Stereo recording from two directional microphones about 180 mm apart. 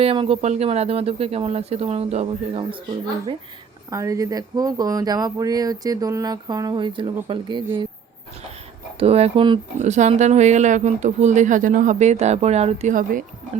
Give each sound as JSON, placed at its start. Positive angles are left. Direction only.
{"t": 0.0, "sound": "speech", "side_deg": -30}
{"t": 3.8, "sound": "speech", "side_deg": -20}
{"t": 9.0, "sound": "speech", "side_deg": -35}
{"t": 9.8, "sound": "speech", "side_deg": -40}